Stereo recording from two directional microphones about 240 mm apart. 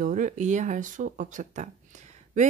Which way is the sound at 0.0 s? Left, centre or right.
Right.